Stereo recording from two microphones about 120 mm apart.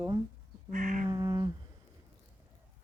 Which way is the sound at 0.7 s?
90° right.